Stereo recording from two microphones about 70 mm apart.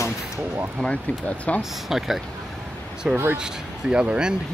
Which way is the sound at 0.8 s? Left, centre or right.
Centre.